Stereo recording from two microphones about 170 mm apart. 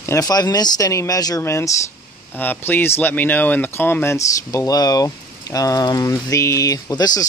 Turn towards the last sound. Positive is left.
turn(degrees=20)  # may be behind; listen again after turning